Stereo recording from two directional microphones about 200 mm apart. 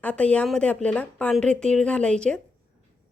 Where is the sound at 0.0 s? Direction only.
5° left (ahead or behind).